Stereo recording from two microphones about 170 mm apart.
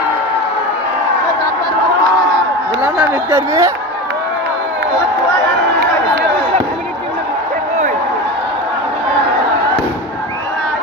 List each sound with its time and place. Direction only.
3.2 s speech: 20° right (ahead or behind)